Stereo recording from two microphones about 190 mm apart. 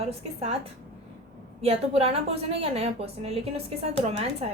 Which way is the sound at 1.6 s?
30° right (ahead or behind).